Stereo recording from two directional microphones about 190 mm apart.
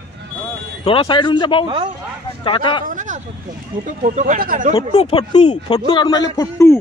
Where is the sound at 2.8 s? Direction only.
40° right (ahead or behind).